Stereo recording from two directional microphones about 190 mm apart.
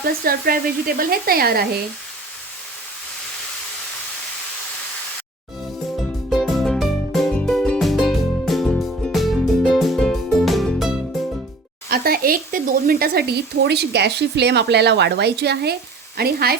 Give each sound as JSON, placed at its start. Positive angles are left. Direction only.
{"t": 0.0, "sound": "speech", "side_deg": -50}
{"t": 6.3, "sound": "music", "side_deg": 0}
{"t": 11.9, "sound": "speech", "side_deg": -55}